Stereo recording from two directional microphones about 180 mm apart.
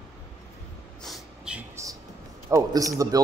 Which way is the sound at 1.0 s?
5° right (ahead or behind).